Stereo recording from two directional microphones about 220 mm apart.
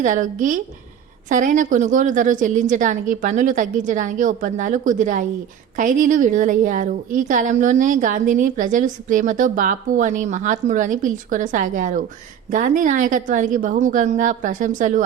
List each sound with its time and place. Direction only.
0.0 s a woman's voice: 35° right (ahead or behind)